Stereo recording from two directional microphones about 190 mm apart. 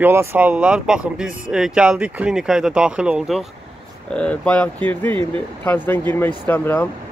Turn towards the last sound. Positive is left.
turn(degrees=10)  # may be behind; listen again after turning